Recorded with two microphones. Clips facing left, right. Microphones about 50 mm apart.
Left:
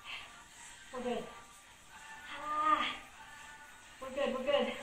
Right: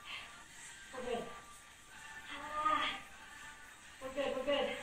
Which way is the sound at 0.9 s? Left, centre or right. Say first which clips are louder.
Left 5 dB; centre.